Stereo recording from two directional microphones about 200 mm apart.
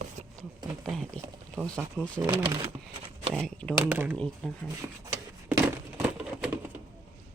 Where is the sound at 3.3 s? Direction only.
5° left (ahead or behind).